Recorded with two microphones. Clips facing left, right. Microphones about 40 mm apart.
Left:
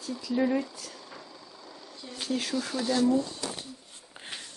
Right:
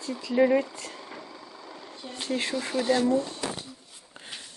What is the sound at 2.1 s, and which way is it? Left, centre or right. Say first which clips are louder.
Speech: right 2 dB; right.